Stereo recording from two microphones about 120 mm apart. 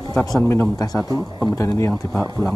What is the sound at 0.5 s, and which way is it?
Speech, 25° left (ahead or behind).